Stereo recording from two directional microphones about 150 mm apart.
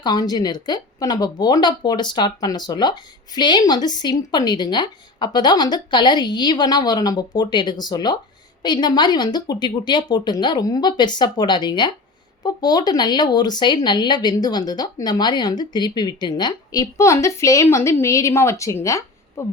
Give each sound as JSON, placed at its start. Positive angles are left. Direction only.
{"t": 0.0, "sound": "a woman's voice", "side_deg": 25}